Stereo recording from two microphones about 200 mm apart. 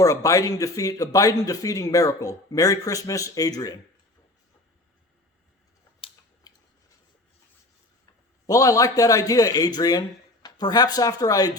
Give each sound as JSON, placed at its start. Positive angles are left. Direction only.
{"t": 0.0, "sound": "a man's voice", "side_deg": 15}
{"t": 6.0, "sound": "a sound", "side_deg": 25}
{"t": 8.4, "sound": "a man's voice", "side_deg": 15}